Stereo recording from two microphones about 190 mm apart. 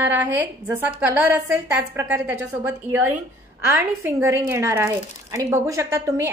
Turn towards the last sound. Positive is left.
turn(degrees=-15)  # may be behind; listen again after turning